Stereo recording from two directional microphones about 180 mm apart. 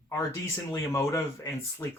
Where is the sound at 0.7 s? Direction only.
15° left (ahead or behind).